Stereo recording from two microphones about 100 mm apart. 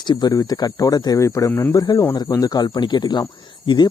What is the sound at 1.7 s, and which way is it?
Speech, 40° left (ahead or behind).